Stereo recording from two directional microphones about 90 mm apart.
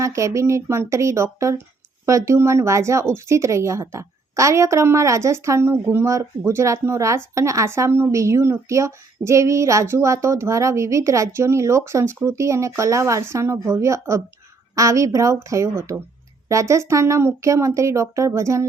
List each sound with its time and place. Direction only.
0.0 s speech: 35° right (ahead or behind)